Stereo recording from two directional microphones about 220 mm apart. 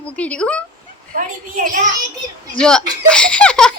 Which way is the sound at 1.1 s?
35° right (ahead or behind).